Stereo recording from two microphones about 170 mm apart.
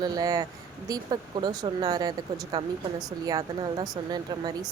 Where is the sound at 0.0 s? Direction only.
20° right (ahead or behind).